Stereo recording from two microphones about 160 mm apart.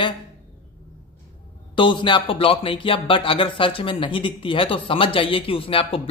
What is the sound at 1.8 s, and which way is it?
Speech, 30° left (ahead or behind).